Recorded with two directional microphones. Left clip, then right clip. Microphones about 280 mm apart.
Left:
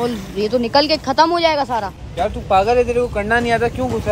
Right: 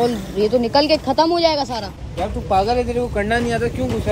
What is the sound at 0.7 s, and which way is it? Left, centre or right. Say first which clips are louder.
Speech: left 3 dB; left.